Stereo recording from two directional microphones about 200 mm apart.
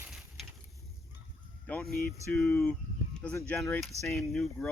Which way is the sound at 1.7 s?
5° left (ahead or behind).